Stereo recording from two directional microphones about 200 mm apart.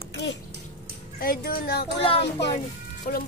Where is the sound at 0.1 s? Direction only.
60° left (ahead or behind).